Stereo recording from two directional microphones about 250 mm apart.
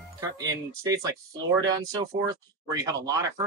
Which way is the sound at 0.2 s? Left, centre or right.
Centre.